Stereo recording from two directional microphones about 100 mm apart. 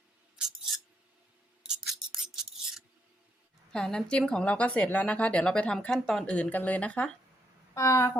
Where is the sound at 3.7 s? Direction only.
5° left (ahead or behind).